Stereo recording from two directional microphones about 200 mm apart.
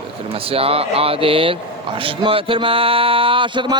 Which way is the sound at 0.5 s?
30° right (ahead or behind).